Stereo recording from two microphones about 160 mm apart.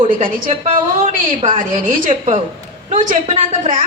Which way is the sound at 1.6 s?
55° right (ahead or behind).